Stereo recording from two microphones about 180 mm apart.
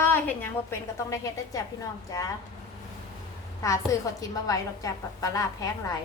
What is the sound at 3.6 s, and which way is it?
A woman's voice, 15° left (ahead or behind).